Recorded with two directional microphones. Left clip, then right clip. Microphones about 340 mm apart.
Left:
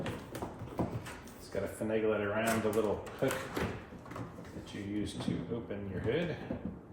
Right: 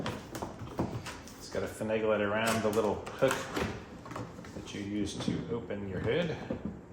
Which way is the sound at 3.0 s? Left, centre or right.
Centre.